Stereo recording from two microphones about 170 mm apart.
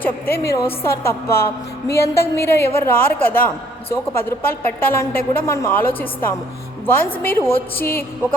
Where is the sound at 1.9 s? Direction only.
15° left (ahead or behind).